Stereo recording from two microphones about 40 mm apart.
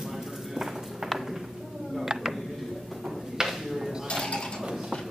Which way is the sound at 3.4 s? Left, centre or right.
Centre.